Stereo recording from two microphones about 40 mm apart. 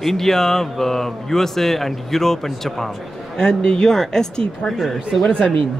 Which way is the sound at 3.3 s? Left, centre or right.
Centre.